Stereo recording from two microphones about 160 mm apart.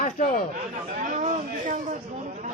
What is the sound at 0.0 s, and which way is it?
Speech, 50° left (ahead or behind).